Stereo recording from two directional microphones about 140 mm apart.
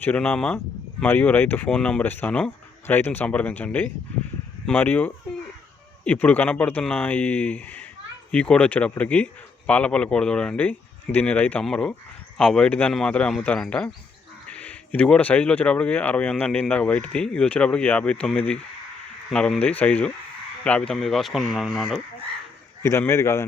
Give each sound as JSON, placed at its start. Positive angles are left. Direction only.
{"t": 0.0, "sound": "speech", "side_deg": 10}
{"t": 22.8, "sound": "a man's voice", "side_deg": 20}